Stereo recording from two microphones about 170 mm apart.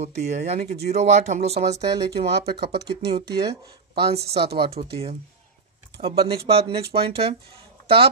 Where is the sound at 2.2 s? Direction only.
75° right (ahead or behind).